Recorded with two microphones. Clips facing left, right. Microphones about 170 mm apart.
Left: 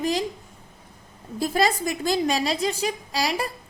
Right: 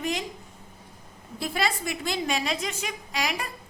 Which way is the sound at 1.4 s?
40° left (ahead or behind).